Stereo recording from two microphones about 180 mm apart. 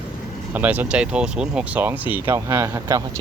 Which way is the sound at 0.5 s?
10° right (ahead or behind).